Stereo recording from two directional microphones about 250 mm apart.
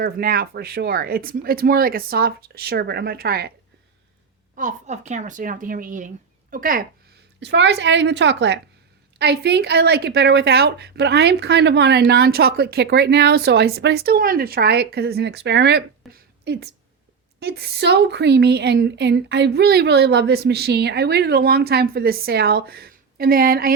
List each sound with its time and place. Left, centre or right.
0.0 s a woman's voice: right
4.5 s a woman's voice: right
7.3 s a woman's voice: right